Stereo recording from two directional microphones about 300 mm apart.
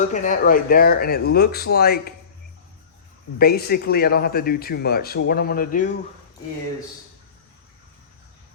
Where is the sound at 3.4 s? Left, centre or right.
Left.